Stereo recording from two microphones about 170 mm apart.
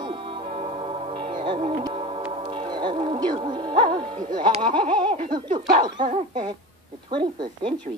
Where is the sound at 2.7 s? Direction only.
30° right (ahead or behind).